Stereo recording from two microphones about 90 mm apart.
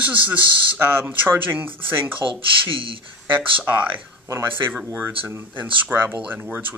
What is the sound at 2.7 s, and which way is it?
Speech, 75° right (ahead or behind).